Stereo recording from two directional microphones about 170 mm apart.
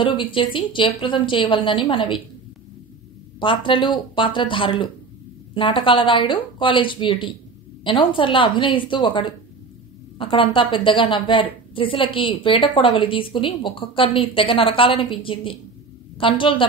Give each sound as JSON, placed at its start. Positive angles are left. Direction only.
{"t": 0.0, "sound": "speech", "side_deg": 30}
{"t": 3.3, "sound": "a woman's voice", "side_deg": 30}